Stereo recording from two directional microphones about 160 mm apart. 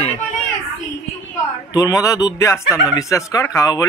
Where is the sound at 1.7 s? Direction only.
20° left (ahead or behind).